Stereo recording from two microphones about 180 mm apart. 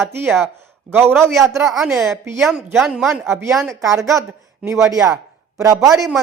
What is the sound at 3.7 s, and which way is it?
Speech, 15° right (ahead or behind).